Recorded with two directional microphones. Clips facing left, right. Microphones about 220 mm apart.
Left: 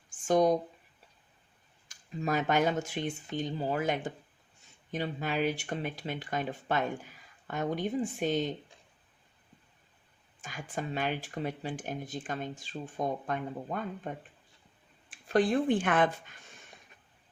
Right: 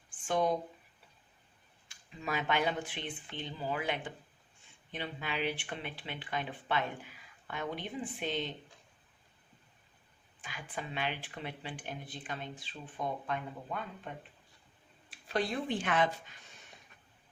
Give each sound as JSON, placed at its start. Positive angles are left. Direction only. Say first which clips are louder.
{"t": 0.1, "sound": "a sound", "louder": "left 6 dB", "side_deg": 40}
{"t": 1.9, "sound": "speech", "louder": "left 6 dB", "side_deg": 45}
{"t": 10.4, "sound": "speech", "louder": "left 5 dB", "side_deg": 45}
{"t": 15.1, "sound": "speech", "louder": "left 8 dB", "side_deg": 50}